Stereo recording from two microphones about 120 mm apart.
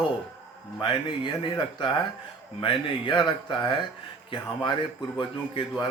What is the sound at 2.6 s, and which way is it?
A man's voice, 40° left (ahead or behind).